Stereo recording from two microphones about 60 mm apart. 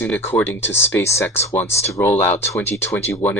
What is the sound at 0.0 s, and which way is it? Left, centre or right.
Speech, left.